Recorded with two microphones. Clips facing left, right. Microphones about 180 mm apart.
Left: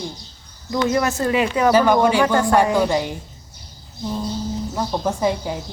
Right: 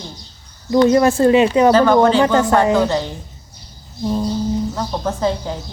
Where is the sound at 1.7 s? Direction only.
10° left (ahead or behind).